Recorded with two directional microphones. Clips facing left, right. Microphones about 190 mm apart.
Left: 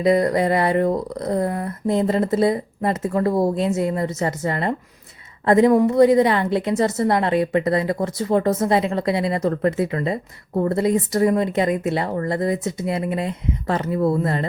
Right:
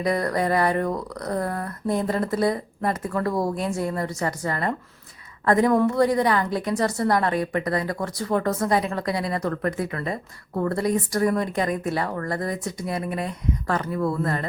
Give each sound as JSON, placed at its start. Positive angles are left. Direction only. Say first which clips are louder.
{"t": 0.0, "sound": "a woman's voice", "louder": "left 6 dB", "side_deg": 20}